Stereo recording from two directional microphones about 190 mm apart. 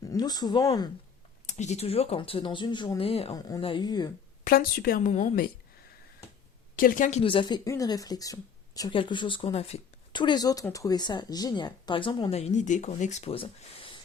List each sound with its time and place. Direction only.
0.0 s speech: 20° left (ahead or behind)
1.5 s speech: 35° left (ahead or behind); by 4.1 s 20° left (ahead or behind)
4.4 s a woman's voice: 50° left (ahead or behind)
6.7 s speech: 45° left (ahead or behind); by 12.4 s 25° left (ahead or behind)
12.4 s speech: 40° left (ahead or behind)